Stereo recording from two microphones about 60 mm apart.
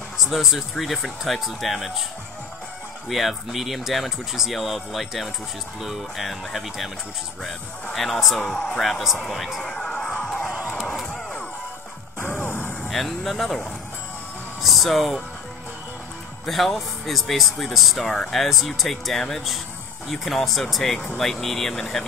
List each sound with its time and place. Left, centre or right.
0.2 s speech: centre
3.1 s speech: centre
7.9 s speech: centre
9.0 s speech: centre
9.8 s music: centre
12.3 s a sound: left
12.9 s speech: centre
14.6 s speech: centre
16.4 s speech: centre